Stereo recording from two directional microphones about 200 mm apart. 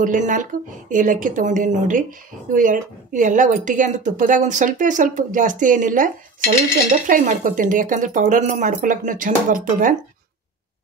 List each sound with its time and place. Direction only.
0.0 s a woman's voice: 40° right (ahead or behind)